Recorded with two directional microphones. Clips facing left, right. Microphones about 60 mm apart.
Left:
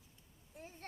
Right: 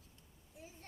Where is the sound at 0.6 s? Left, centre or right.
Left.